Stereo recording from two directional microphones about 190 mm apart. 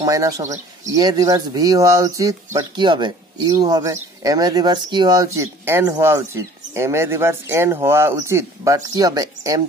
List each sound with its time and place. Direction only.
0.0 s speech: 15° right (ahead or behind)